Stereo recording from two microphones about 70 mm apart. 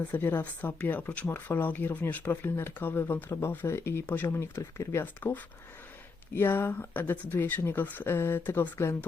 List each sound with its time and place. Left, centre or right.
0.0 s speech: left
6.3 s speech: left